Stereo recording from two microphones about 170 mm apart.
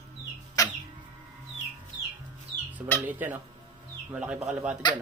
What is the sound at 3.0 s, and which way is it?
Speech, 10° right (ahead or behind).